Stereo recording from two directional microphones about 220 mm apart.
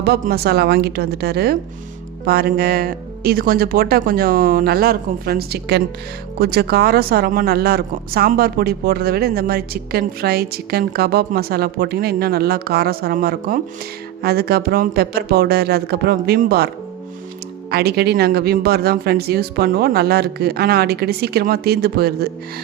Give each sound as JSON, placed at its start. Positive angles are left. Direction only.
{"t": 0.0, "sound": "speech", "side_deg": -45}
{"t": 17.7, "sound": "speech", "side_deg": -45}